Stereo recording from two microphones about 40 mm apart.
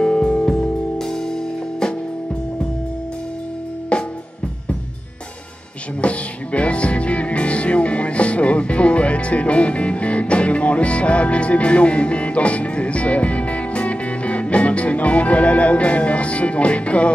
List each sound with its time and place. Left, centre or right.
0.0 s music: left
3.9 s music: left
5.9 s music: left